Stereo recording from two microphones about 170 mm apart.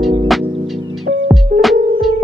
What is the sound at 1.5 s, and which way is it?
Music, 60° right (ahead or behind).